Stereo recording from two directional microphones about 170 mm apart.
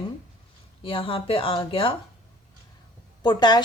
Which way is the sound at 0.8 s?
30° left (ahead or behind).